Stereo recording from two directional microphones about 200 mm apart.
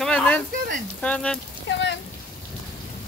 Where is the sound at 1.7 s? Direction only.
60° left (ahead or behind).